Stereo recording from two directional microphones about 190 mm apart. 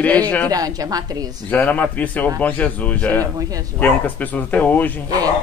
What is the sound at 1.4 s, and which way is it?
A woman's voice, 10° left (ahead or behind).